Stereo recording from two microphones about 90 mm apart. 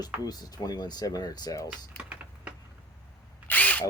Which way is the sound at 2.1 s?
15° right (ahead or behind).